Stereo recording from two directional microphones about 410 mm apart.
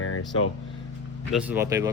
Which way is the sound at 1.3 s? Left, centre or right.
Centre.